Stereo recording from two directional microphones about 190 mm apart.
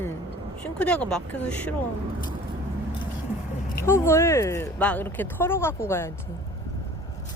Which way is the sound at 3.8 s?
15° left (ahead or behind).